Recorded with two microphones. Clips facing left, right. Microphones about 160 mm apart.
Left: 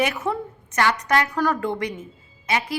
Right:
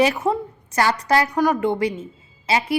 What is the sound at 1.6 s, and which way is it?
Speech, 25° right (ahead or behind).